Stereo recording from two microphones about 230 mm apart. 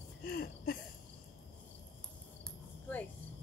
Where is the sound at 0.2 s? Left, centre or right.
Left.